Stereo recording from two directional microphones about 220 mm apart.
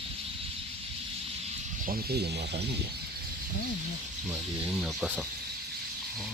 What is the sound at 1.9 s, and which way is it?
Speech, 45° right (ahead or behind).